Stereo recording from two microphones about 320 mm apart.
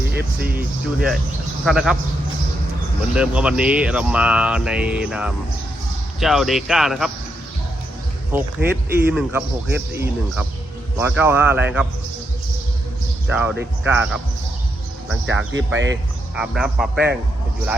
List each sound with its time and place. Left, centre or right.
0.5 s speech: centre
3.2 s speech: centre
8.3 s speech: centre
13.2 s speech: centre
15.5 s speech: right
16.3 s speech: centre